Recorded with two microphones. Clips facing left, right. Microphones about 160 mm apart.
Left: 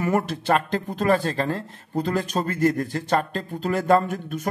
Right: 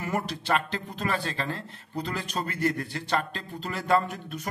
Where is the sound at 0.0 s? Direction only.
50° left (ahead or behind).